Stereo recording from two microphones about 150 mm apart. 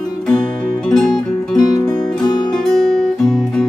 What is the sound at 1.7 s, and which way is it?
Music, 25° left (ahead or behind).